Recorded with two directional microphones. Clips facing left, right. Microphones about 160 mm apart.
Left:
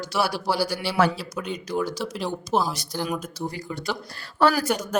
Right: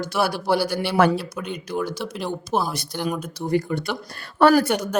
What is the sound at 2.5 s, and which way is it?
Speech, 10° right (ahead or behind).